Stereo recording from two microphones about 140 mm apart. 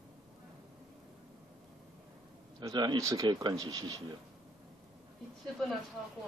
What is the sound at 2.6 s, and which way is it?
Speech, 30° right (ahead or behind).